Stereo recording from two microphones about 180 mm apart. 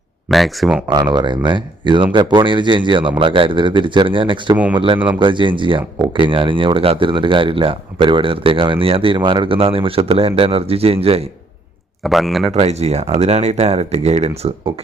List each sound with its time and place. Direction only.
0.3 s speech: centre (ahead or behind)
0.9 s speech: 25° right (ahead or behind)
4.5 s speech: 10° right (ahead or behind)
5.2 s speech: 25° right (ahead or behind)
12.0 s speech: centre (ahead or behind)
12.5 s speech: 35° right (ahead or behind)